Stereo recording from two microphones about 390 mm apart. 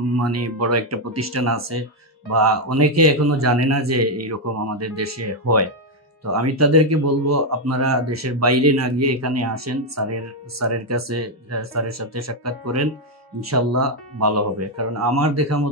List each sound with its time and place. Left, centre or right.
0.2 s speech: right